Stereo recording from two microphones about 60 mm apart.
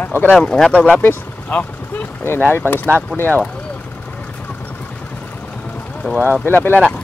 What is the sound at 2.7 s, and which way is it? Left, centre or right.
Speech, right.